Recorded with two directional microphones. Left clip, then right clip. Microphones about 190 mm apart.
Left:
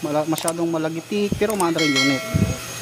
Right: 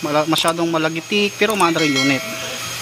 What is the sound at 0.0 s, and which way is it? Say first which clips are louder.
Speech: right 5 dB; centre (ahead or behind).